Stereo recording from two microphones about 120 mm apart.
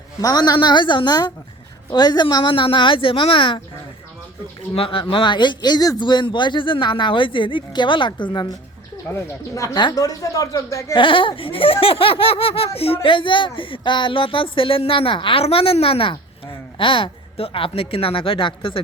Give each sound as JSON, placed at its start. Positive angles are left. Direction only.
{"t": 0.2, "sound": "speech", "side_deg": 30}
{"t": 1.9, "sound": "laughter", "side_deg": 35}
{"t": 4.7, "sound": "speech", "side_deg": 50}
{"t": 9.0, "sound": "speech", "side_deg": 25}
{"t": 10.9, "sound": "laughter", "side_deg": 45}